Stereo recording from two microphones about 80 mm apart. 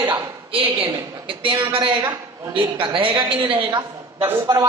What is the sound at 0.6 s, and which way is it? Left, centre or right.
A woman's voice, right.